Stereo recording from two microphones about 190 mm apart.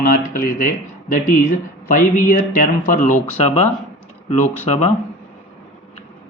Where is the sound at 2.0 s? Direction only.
50° left (ahead or behind); by 4.9 s 35° left (ahead or behind).